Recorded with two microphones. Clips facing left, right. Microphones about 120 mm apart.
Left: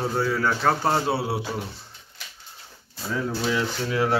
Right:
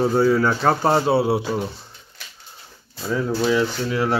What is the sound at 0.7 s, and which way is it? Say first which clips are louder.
Speech: right 4 dB; 45° right (ahead or behind).